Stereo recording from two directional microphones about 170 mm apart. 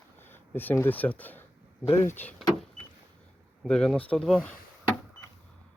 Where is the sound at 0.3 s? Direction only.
10° left (ahead or behind).